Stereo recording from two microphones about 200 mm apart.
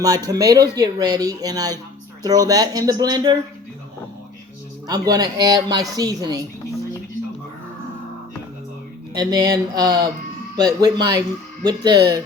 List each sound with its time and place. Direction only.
0.3 s a woman's voice: 20° right (ahead or behind)
4.9 s a woman's voice: 20° right (ahead or behind)
9.1 s a woman's voice: 20° right (ahead or behind)